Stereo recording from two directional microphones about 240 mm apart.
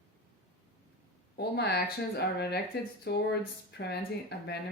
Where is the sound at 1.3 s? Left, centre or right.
Left.